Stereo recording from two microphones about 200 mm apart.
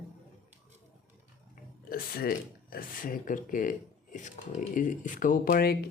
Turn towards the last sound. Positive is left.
turn(degrees=50)  # may be behind; listen again after turning